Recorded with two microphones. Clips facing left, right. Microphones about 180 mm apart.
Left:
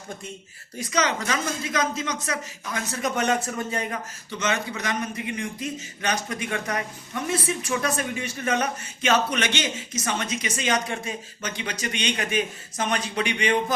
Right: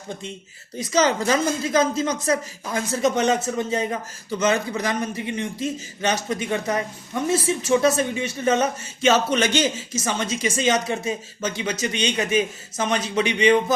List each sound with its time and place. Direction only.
0.8 s speech: 30° right (ahead or behind)